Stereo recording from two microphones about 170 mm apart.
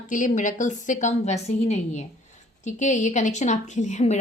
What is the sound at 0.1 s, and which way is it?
A woman's voice, 50° left (ahead or behind).